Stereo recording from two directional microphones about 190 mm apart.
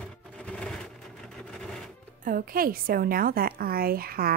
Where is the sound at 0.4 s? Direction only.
5° left (ahead or behind).